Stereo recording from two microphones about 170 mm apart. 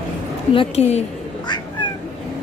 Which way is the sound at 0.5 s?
35° left (ahead or behind).